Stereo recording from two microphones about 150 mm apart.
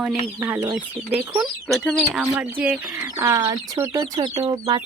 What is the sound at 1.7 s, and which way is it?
Speech, 5° left (ahead or behind).